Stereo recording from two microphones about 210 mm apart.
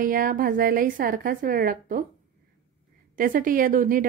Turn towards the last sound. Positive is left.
turn(degrees=-40)  # may be behind; listen again after turning